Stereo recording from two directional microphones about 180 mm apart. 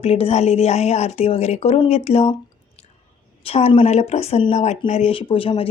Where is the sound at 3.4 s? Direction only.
35° left (ahead or behind).